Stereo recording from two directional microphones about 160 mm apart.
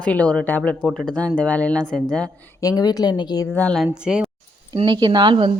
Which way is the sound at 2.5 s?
20° left (ahead or behind).